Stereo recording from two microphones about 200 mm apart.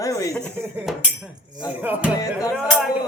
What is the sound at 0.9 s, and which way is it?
Speech, centre (ahead or behind).